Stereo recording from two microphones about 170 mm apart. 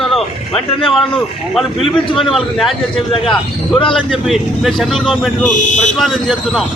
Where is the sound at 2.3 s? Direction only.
Centre (ahead or behind).